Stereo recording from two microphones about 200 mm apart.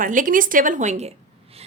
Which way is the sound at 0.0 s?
40° right (ahead or behind).